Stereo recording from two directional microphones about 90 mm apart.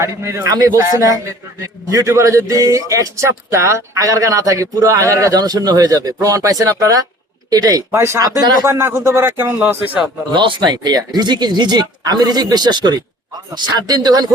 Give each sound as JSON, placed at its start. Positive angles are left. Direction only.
{"t": 0.0, "sound": "a man's voice", "side_deg": -30}
{"t": 7.9, "sound": "speech", "side_deg": -30}
{"t": 10.3, "sound": "speech", "side_deg": -60}